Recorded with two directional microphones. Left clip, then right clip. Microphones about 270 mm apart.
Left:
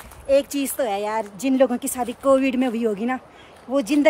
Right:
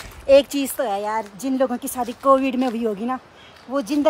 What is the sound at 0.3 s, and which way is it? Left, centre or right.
Speech, centre.